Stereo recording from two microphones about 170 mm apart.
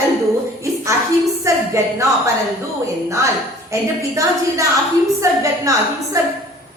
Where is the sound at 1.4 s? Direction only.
15° right (ahead or behind).